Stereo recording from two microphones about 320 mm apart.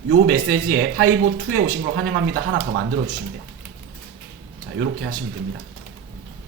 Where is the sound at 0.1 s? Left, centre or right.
Right.